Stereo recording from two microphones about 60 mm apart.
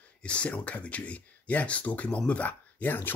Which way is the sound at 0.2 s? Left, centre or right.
Centre.